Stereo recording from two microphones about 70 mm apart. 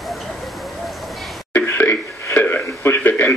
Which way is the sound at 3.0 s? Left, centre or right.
Left.